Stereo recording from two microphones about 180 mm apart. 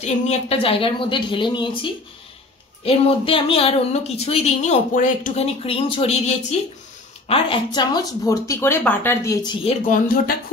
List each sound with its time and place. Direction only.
0.0 s a woman's voice: 35° left (ahead or behind); by 9.5 s 15° left (ahead or behind)
9.8 s speech: 50° left (ahead or behind)